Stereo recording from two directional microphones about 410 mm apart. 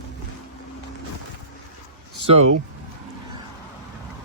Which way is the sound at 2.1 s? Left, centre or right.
Centre.